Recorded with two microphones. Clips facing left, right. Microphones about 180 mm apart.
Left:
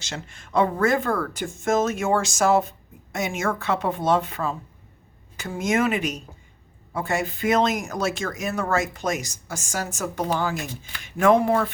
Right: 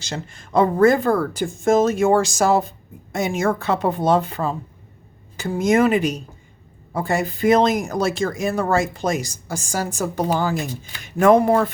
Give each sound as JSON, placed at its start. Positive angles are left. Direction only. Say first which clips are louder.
{"t": 0.0, "sound": "speech", "louder": "right 5 dB", "side_deg": -35}